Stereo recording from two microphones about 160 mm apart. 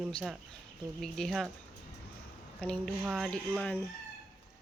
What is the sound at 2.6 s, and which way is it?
Speech, 5° left (ahead or behind).